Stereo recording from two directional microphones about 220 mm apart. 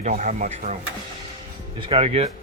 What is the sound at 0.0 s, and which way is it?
Speech, 35° right (ahead or behind).